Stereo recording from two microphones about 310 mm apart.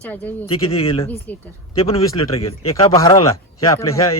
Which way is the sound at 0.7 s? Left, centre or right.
Centre.